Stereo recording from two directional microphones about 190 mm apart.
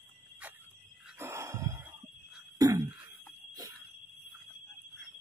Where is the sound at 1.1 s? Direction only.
15° right (ahead or behind).